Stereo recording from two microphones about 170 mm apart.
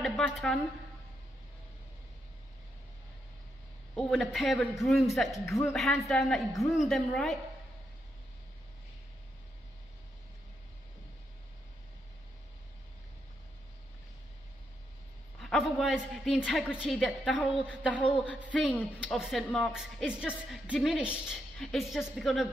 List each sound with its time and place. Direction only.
0.0 s a woman's voice: centre (ahead or behind)
3.9 s a woman's voice: centre (ahead or behind)
15.3 s a woman's voice: centre (ahead or behind)